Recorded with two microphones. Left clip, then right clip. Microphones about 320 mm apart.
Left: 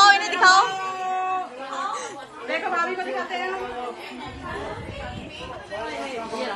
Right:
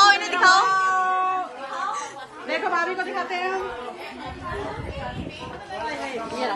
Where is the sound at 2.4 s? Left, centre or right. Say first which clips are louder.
Right 1 dB; right.